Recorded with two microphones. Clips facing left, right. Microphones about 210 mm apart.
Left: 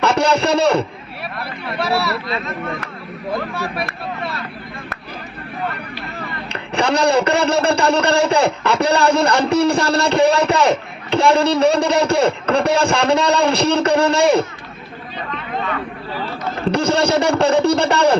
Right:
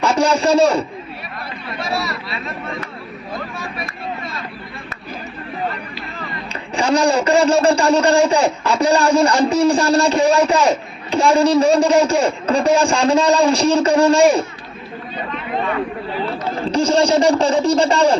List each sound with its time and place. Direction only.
0.0 s a man's voice: 65° left (ahead or behind)
1.4 s a sound: 65° left (ahead or behind)
3.3 s speech: 65° left (ahead or behind)
6.5 s speech: 65° left (ahead or behind)
15.6 s a sound: 30° right (ahead or behind)
16.7 s speech: 65° left (ahead or behind)